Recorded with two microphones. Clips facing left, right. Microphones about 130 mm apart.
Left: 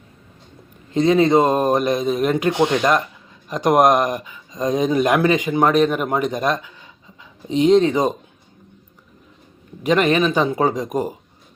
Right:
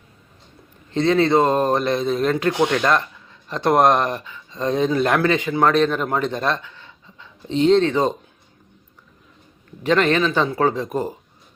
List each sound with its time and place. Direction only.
0.9 s speech: 15° left (ahead or behind)
9.8 s speech: 15° left (ahead or behind)